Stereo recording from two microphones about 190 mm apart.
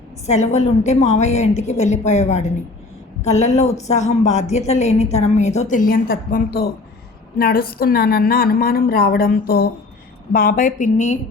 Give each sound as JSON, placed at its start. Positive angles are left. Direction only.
{"t": 0.3, "sound": "a woman's voice", "side_deg": 35}